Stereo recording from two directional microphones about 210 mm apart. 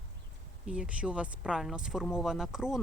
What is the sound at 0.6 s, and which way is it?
Speech, 5° right (ahead or behind).